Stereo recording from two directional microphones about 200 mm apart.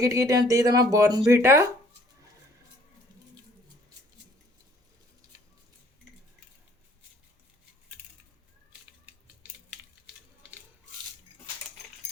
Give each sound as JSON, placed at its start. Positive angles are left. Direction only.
{"t": 0.0, "sound": "speech", "side_deg": -15}